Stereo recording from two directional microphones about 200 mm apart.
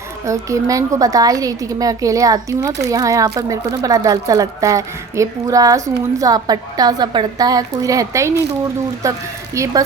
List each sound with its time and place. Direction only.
0.3 s speech: 15° right (ahead or behind)